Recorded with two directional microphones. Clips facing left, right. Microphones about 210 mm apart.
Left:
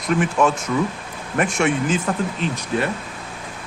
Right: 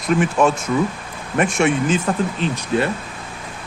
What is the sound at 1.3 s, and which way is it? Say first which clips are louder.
Speech: right 2 dB; 25° right (ahead or behind).